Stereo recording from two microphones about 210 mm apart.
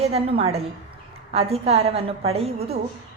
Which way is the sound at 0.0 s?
30° right (ahead or behind).